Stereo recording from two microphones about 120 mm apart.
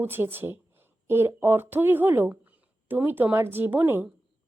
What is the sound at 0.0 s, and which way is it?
A woman's voice, 20° right (ahead or behind).